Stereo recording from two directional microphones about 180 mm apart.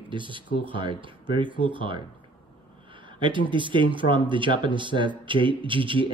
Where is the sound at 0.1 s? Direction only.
25° right (ahead or behind).